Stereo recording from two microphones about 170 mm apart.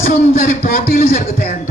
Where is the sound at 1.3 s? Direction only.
50° left (ahead or behind).